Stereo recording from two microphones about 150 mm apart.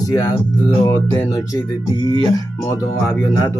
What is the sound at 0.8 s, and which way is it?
Speech, 20° left (ahead or behind).